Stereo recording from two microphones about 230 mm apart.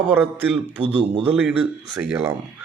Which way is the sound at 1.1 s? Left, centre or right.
Right.